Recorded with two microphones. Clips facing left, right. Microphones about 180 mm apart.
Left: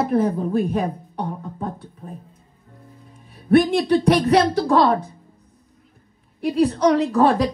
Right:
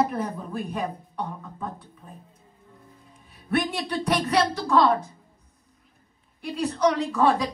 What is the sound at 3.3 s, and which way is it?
Speech, 45° left (ahead or behind).